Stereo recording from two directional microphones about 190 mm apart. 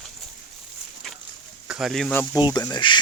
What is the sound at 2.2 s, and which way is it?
Speech, 20° left (ahead or behind).